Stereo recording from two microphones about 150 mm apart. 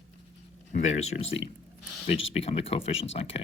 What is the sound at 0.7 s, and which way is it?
Speech, 50° left (ahead or behind).